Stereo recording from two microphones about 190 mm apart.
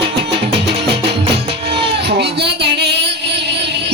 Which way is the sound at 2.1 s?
60° right (ahead or behind).